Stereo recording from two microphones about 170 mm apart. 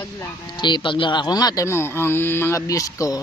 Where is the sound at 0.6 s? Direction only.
25° left (ahead or behind).